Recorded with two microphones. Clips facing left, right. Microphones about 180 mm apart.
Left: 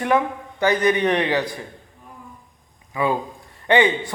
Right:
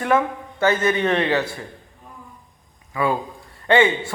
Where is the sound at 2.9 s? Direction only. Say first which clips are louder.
Even; 20° left (ahead or behind).